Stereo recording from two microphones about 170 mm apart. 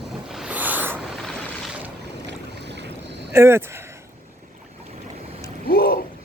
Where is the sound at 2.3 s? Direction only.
90° right.